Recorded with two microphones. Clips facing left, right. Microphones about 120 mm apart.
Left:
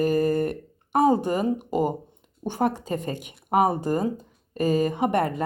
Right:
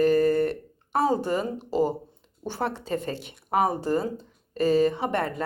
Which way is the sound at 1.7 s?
15° left (ahead or behind).